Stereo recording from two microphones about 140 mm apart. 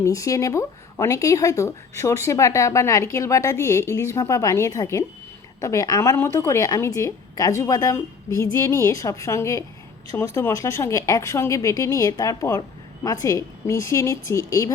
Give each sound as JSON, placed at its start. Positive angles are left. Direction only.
{"t": 0.0, "sound": "speech", "side_deg": 25}